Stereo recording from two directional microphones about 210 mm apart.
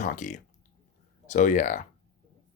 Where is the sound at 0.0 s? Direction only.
35° left (ahead or behind).